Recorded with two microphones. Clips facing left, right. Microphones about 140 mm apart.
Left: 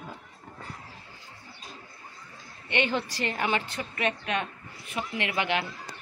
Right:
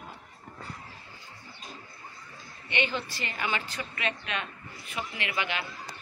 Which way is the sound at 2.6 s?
60° left (ahead or behind).